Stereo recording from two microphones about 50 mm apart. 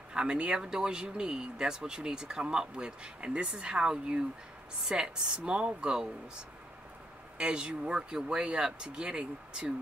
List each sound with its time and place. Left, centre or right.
0.1 s speech: centre
7.4 s speech: centre